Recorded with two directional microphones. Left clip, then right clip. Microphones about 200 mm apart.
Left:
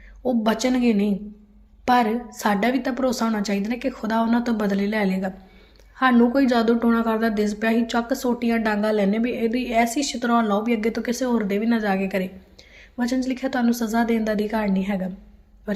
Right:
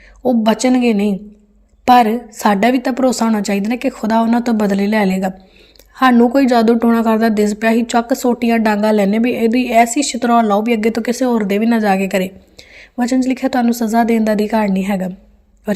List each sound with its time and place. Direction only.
0.2 s a woman's voice: 40° right (ahead or behind)